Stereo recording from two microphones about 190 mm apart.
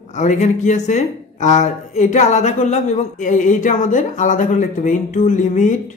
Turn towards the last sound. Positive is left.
turn(degrees=40)  # may be behind; listen again after turning